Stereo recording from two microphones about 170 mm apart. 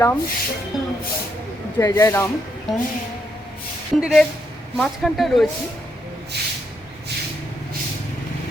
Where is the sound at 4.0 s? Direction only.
Centre (ahead or behind).